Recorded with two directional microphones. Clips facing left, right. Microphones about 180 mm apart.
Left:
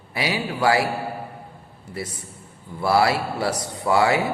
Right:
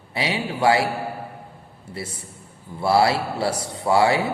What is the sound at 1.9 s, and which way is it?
A man's voice, 30° right (ahead or behind).